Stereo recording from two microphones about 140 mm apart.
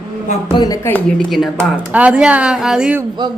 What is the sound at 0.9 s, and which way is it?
Speech, 10° left (ahead or behind).